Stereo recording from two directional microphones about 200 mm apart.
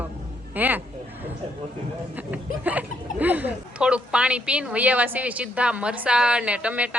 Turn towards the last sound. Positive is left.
turn(degrees=-5)  # may be behind; listen again after turning